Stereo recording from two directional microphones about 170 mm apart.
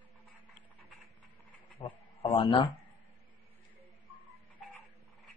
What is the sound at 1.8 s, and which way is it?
Speech, 35° left (ahead or behind).